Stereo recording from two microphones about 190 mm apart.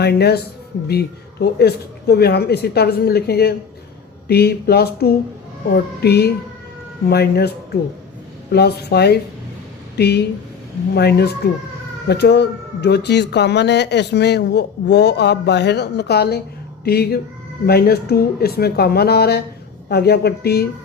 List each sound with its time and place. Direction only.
0.0 s speech: 60° left (ahead or behind)